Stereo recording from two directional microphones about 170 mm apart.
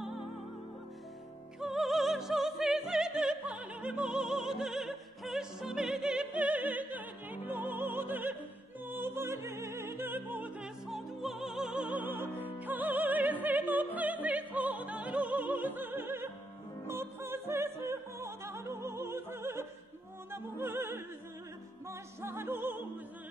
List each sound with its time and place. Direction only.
1.6 s opera: centre (ahead or behind)
8.8 s music: 10° right (ahead or behind)